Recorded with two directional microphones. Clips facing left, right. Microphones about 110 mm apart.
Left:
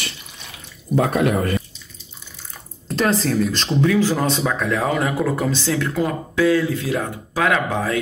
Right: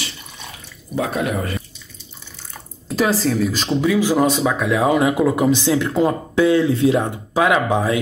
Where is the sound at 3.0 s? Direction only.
Centre (ahead or behind).